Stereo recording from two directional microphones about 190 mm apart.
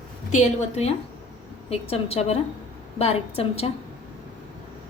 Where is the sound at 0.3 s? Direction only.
40° left (ahead or behind).